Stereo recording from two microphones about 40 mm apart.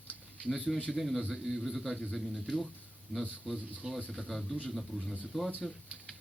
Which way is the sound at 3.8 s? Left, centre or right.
Right.